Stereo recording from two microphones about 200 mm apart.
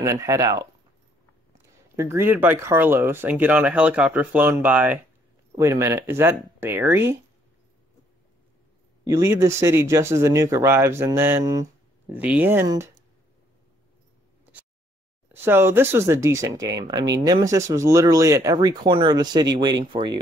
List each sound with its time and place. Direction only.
0.0 s speech: 15° right (ahead or behind)
2.0 s speech: 15° right (ahead or behind)
9.0 s speech: 15° right (ahead or behind)
15.2 s speech: 10° right (ahead or behind)